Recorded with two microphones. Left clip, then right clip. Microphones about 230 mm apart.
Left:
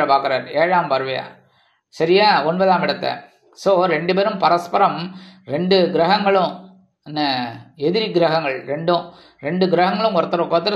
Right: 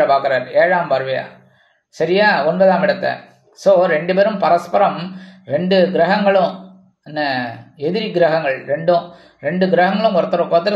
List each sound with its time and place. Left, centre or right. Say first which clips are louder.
0.0 s speech: right 2 dB; left
7.8 s speech: right 1 dB; left